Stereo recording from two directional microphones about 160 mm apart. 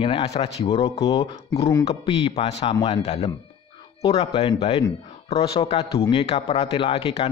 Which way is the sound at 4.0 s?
35° left (ahead or behind).